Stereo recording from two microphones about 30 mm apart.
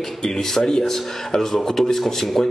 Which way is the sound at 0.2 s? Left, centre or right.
Centre.